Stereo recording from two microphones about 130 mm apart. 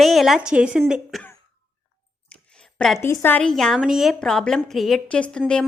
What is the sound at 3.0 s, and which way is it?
Speech, 20° left (ahead or behind).